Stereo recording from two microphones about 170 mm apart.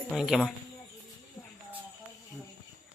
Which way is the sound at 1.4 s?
25° left (ahead or behind).